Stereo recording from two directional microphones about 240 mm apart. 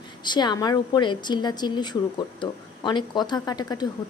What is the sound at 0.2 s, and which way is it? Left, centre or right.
Speech, centre.